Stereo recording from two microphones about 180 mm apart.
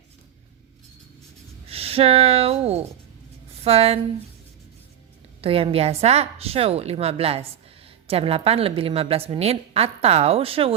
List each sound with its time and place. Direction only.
1.6 s a woman's voice: 35° right (ahead or behind)
5.4 s a woman's voice: 30° right (ahead or behind)